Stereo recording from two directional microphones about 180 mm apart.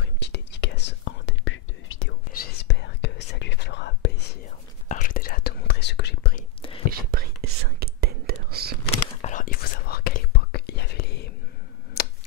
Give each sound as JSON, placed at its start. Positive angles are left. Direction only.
{"t": 0.0, "sound": "whispering", "side_deg": 70}
{"t": 2.3, "sound": "whispering", "side_deg": 65}
{"t": 4.8, "sound": "whispering", "side_deg": 45}
{"t": 6.9, "sound": "whispering", "side_deg": -55}
{"t": 8.9, "sound": "whispering", "side_deg": 40}
{"t": 12.0, "sound": "a sound", "side_deg": 60}